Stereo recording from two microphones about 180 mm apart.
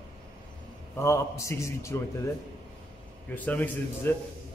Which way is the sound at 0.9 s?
15° left (ahead or behind).